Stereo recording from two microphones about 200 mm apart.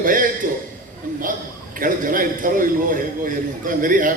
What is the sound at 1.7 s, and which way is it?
A man's voice, 45° right (ahead or behind).